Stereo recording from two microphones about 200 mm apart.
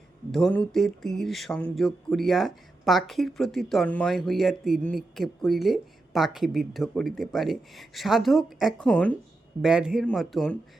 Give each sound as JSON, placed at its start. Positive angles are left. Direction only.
{"t": 0.3, "sound": "speech", "side_deg": 0}